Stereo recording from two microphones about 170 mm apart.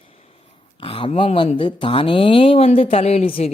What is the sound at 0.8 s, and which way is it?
Speech, 30° left (ahead or behind).